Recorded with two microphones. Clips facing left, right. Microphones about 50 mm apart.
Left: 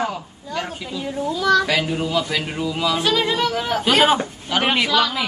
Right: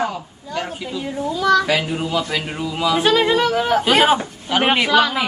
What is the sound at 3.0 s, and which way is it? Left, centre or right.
A man's voice, centre.